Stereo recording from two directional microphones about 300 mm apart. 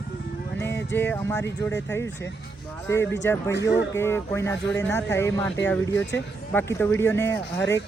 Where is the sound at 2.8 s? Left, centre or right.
Centre.